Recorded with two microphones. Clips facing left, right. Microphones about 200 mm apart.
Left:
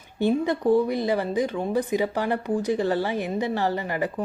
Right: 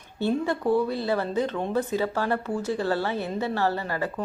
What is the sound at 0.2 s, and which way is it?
Speech, 15° left (ahead or behind).